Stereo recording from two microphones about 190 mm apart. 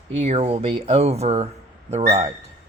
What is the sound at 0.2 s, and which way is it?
Speech, 35° right (ahead or behind).